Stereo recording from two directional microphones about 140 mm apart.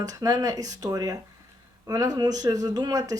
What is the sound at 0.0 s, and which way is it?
Speech, 25° right (ahead or behind).